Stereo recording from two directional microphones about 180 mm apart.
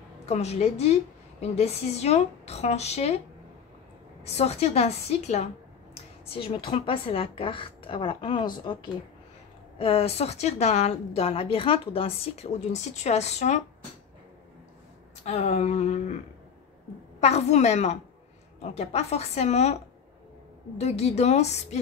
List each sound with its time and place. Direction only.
0.3 s a woman's voice: 35° left (ahead or behind)
4.2 s a woman's voice: 35° left (ahead or behind)
9.8 s a woman's voice: 35° left (ahead or behind)
15.2 s a woman's voice: 35° left (ahead or behind)
17.2 s a woman's voice: 35° left (ahead or behind)